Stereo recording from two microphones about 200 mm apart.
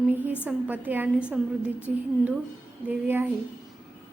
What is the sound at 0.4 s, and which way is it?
A woman's voice, 10° right (ahead or behind).